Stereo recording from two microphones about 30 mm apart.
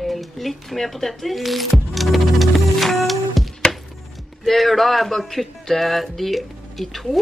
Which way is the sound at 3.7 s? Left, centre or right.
Centre.